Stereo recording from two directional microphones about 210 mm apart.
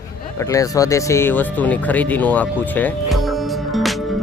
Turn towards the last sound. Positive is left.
turn(degrees=0)  # may be behind; listen again after turning